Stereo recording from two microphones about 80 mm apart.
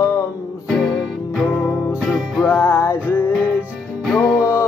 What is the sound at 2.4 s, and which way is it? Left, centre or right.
Music, left.